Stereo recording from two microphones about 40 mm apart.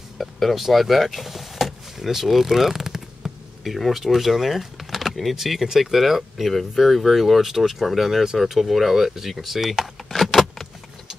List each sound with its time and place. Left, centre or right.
0.2 s speech: centre
3.2 s insect: centre
3.6 s speech: centre
10.2 s vehicle: centre